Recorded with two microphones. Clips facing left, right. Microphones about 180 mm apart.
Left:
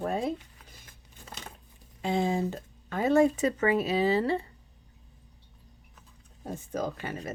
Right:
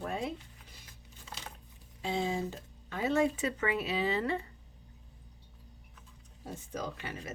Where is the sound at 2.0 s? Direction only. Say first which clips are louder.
Left 5 dB; 55° left (ahead or behind); by 4.4 s 35° left (ahead or behind).